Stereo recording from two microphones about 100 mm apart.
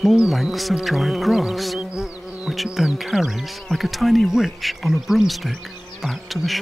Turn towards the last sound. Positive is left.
turn(degrees=0)  # may be behind; listen again after turning